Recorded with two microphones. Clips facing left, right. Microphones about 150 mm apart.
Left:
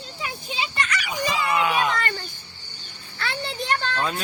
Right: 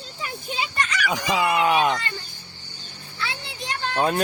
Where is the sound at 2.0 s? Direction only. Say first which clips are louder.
Left 5 dB; 60° left (ahead or behind).